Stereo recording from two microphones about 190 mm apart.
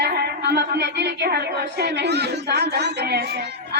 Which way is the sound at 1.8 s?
60° right (ahead or behind).